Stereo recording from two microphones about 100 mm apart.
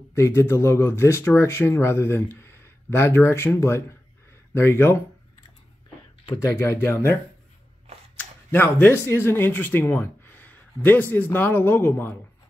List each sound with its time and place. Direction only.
0.1 s speech: 30° left (ahead or behind)
6.4 s speech: 25° left (ahead or behind)
8.2 s speech: 20° left (ahead or behind)